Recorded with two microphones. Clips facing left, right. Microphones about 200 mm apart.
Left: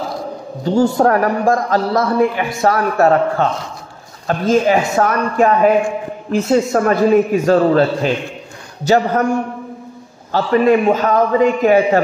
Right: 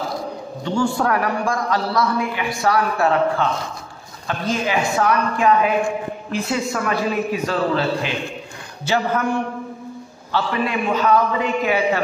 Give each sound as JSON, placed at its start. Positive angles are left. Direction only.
{"t": 0.7, "sound": "a man's voice", "side_deg": 40}